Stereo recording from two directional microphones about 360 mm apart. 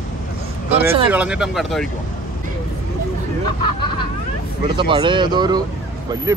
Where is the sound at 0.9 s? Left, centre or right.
Centre.